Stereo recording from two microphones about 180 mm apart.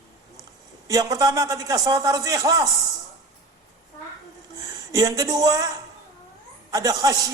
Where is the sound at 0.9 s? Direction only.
20° right (ahead or behind).